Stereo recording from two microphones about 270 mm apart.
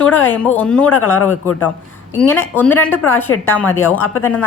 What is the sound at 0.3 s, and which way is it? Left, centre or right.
Speech, centre.